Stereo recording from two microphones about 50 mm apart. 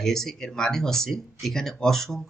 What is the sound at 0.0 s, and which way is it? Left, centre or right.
Speech, centre.